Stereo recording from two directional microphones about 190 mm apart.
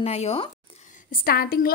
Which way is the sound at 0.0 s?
30° left (ahead or behind).